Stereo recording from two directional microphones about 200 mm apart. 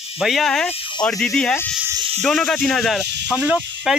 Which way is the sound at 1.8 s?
20° right (ahead or behind).